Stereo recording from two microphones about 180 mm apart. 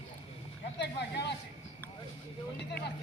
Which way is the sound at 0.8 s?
70° left (ahead or behind).